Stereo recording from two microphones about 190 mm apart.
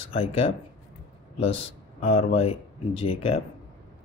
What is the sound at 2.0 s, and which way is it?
Speech, 30° left (ahead or behind).